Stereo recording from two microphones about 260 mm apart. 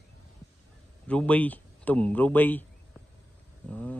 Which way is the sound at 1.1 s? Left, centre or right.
Centre.